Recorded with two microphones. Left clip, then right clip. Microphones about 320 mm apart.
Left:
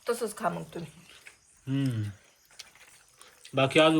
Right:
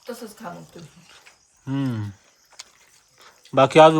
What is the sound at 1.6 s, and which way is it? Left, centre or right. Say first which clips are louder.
Speech: right 5 dB; centre.